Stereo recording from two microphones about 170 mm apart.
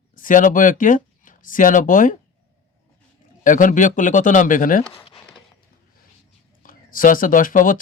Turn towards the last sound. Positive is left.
turn(degrees=50)  # may be behind; listen again after turning